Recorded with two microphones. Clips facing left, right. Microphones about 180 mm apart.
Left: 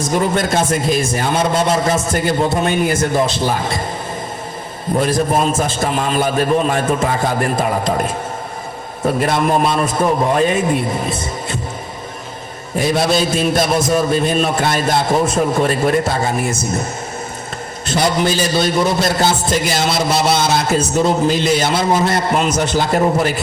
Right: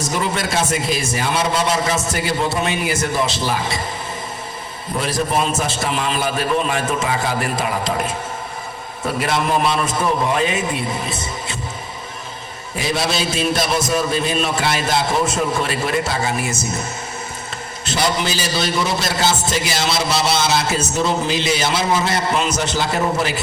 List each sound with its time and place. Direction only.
0.0 s a man's voice: 50° left (ahead or behind)
4.9 s a man's voice: 50° left (ahead or behind)
9.0 s a man's voice: 45° left (ahead or behind)
12.7 s a man's voice: 50° left (ahead or behind)
17.8 s a man's voice: 55° left (ahead or behind)